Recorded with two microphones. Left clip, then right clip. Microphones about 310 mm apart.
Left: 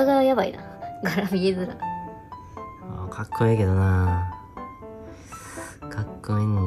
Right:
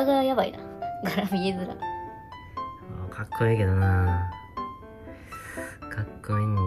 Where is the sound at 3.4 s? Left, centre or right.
Centre.